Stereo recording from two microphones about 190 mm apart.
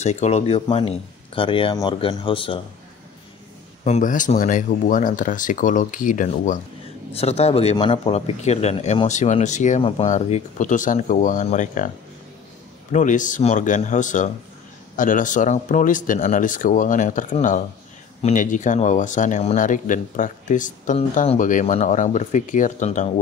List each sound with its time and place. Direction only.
0.0 s speech: 35° left (ahead or behind)
3.8 s speech: 40° left (ahead or behind)
12.9 s speech: 40° left (ahead or behind)